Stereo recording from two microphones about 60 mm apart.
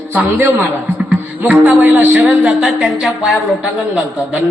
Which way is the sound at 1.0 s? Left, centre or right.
Right.